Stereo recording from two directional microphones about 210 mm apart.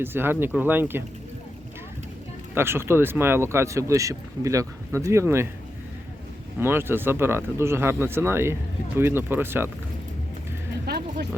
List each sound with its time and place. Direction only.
0.0 s speech: 10° right (ahead or behind)
2.6 s speech: 10° right (ahead or behind)
6.6 s speech: 10° right (ahead or behind)
10.8 s music: 50° right (ahead or behind)